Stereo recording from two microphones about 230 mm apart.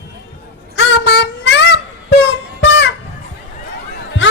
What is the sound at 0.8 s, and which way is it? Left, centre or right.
Child singing, left.